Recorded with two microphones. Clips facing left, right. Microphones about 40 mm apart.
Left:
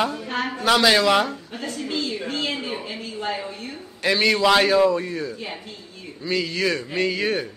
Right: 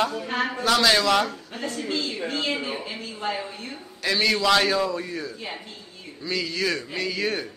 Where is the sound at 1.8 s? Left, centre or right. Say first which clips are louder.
Left 2 dB; centre.